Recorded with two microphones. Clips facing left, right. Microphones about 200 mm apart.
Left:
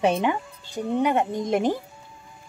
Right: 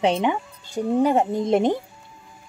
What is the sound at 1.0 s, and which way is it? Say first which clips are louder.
Speech: right 3 dB; 30° right (ahead or behind).